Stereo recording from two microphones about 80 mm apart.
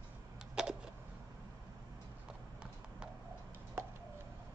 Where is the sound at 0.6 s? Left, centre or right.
Centre.